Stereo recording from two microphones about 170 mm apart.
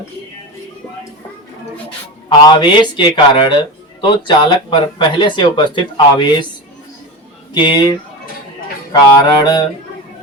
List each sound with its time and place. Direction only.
2.4 s speech: 25° left (ahead or behind)
7.5 s speech: 25° left (ahead or behind)